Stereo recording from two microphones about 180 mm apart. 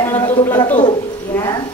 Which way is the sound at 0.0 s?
10° left (ahead or behind).